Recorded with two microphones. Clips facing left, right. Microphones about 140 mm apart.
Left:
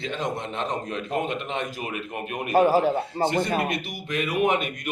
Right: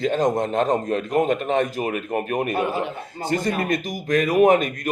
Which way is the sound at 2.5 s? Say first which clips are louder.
Left 5 dB; 40° left (ahead or behind).